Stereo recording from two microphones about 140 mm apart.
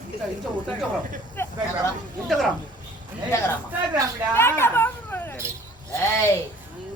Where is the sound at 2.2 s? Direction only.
Centre (ahead or behind).